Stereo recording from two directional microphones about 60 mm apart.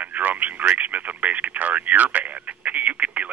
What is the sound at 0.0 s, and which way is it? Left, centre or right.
Speech, right.